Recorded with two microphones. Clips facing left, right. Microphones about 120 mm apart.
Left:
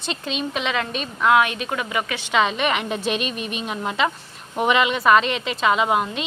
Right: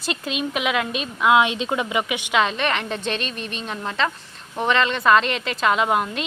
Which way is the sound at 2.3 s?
Centre (ahead or behind).